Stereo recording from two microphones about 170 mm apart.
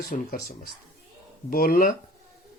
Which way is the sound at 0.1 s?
60° left (ahead or behind).